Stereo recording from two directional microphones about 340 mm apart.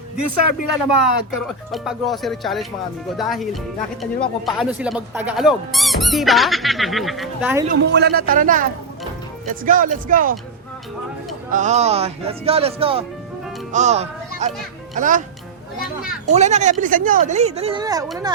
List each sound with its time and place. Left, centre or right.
0.2 s speech: left
1.5 s speech: centre
7.7 s speech: right
11.5 s speech: centre
16.2 s speech: centre